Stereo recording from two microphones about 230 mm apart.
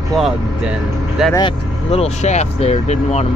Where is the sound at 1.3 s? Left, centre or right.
Left.